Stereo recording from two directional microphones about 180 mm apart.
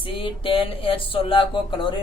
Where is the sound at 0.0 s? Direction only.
30° left (ahead or behind).